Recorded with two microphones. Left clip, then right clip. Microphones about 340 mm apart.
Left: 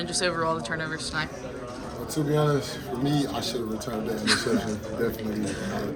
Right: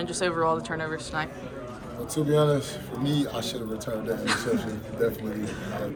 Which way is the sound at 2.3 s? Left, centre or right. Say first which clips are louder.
Right 2 dB; centre.